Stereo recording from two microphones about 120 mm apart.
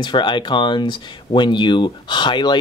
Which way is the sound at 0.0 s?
40° left (ahead or behind).